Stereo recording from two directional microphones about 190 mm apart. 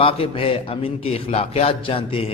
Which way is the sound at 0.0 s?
30° left (ahead or behind).